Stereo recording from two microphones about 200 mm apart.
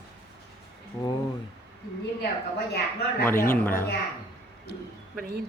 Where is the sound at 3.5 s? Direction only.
10° left (ahead or behind).